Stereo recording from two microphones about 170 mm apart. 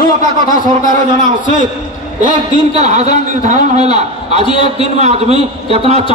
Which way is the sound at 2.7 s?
45° right (ahead or behind).